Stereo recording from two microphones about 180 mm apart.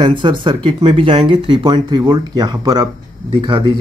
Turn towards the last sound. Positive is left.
turn(degrees=-25)  # may be behind; listen again after turning